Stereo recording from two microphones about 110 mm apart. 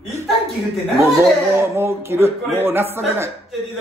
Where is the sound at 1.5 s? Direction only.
25° right (ahead or behind).